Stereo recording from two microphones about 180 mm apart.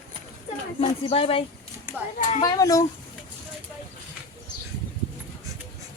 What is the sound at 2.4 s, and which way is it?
Speech, 20° left (ahead or behind).